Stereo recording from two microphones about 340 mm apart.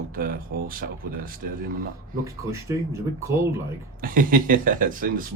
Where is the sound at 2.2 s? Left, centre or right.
Centre.